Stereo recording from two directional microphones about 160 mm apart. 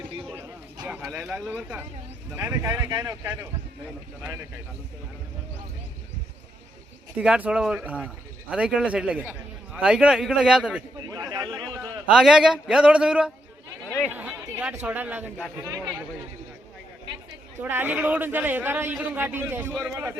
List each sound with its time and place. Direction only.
0.3 s a sound: 15° right (ahead or behind)
1.0 s a man's voice: centre (ahead or behind); by 3.2 s 20° right (ahead or behind)
7.2 s a man's voice: 5° right (ahead or behind)
11.1 s a sound: 25° right (ahead or behind)
12.0 s a man's voice: 5° right (ahead or behind)
15.6 s speech: 25° right (ahead or behind)
17.6 s a man's voice: 10° right (ahead or behind)